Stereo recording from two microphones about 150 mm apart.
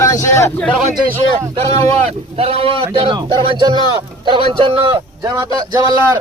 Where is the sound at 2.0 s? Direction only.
40° right (ahead or behind).